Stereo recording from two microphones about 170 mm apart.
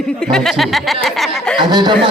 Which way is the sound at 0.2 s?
5° left (ahead or behind).